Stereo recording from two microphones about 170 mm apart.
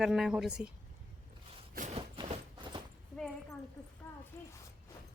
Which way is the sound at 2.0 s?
30° right (ahead or behind).